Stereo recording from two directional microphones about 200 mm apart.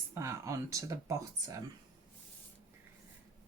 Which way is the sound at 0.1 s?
15° right (ahead or behind).